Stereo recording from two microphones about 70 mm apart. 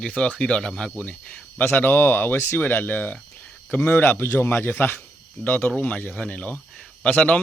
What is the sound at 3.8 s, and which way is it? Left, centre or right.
Speech, left.